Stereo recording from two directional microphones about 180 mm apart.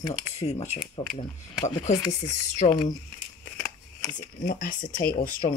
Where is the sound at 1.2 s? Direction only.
40° left (ahead or behind).